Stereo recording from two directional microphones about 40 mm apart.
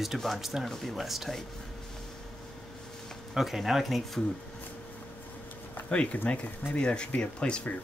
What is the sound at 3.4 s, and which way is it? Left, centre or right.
Speech, centre.